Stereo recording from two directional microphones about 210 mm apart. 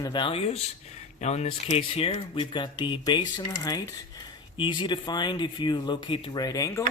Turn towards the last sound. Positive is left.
turn(degrees=15)  # may be behind; listen again after turning